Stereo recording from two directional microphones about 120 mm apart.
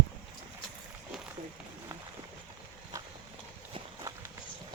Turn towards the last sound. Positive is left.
turn(degrees=-30)  # may be behind; listen again after turning